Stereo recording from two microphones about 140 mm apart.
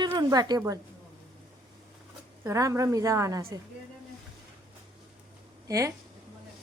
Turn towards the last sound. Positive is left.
turn(degrees=-25)  # may be behind; listen again after turning